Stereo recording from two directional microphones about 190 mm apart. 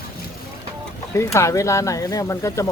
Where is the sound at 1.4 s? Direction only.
15° left (ahead or behind).